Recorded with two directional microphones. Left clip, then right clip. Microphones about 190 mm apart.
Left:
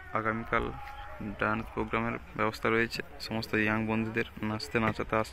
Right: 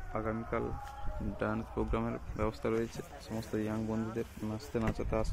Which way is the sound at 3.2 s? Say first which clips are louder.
Left 8 dB; 25° left (ahead or behind).